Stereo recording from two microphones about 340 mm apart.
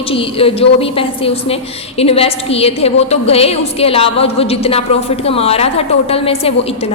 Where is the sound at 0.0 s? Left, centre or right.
Centre.